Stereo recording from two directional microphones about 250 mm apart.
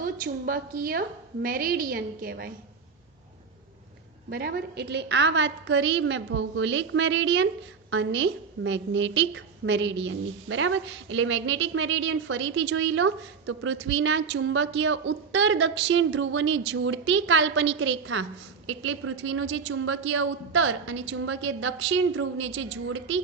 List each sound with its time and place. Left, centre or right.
0.0 s a woman's voice: right
4.3 s a woman's voice: right